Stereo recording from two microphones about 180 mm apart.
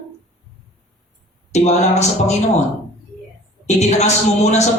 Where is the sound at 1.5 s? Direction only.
40° left (ahead or behind).